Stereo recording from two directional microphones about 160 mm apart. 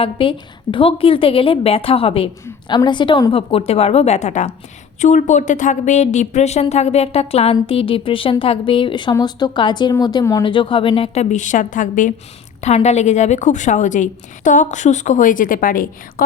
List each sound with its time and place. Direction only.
0.0 s a woman's voice: 35° left (ahead or behind)
3.3 s a woman's voice: 40° left (ahead or behind); by 16.2 s 60° left (ahead or behind)